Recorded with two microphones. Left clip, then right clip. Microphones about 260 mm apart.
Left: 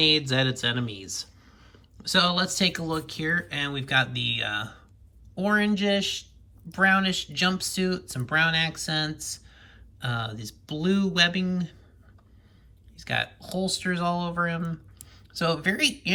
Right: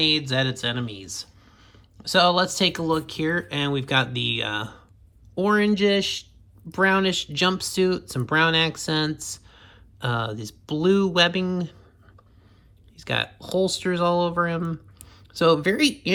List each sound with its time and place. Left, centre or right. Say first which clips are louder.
0.0 s speech: even; centre
13.0 s speech: right 2 dB; centre